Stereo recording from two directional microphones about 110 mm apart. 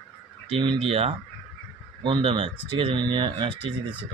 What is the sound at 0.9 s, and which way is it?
Speech, 60° right (ahead or behind).